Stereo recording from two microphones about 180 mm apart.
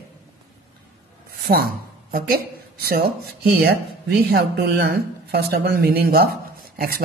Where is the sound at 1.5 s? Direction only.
45° right (ahead or behind).